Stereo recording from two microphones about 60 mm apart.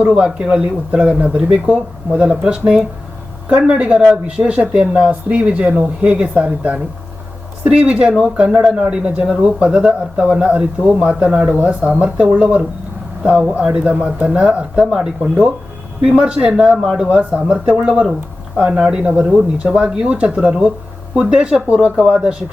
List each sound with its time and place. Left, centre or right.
0.2 s speech: centre